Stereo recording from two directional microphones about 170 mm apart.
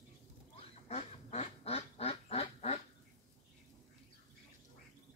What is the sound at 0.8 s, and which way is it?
Duck, 35° left (ahead or behind).